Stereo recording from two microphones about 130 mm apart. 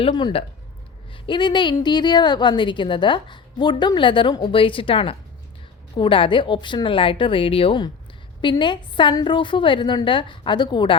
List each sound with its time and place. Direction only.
0.0 s a woman's voice: 35° left (ahead or behind)